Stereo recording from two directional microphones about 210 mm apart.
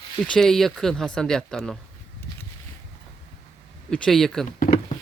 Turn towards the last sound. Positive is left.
turn(degrees=35)  # may be behind; listen again after turning